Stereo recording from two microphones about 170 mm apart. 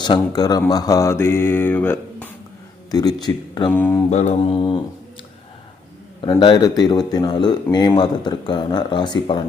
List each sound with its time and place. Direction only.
0.0 s speech: 25° left (ahead or behind)
2.9 s speech: 20° left (ahead or behind)
3.7 s speech: 10° left (ahead or behind)
4.1 s mantra: 40° left (ahead or behind)
4.5 s speech: 25° left (ahead or behind)
6.4 s speech: 25° left (ahead or behind)